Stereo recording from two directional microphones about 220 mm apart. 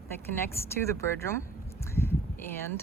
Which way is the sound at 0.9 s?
10° left (ahead or behind).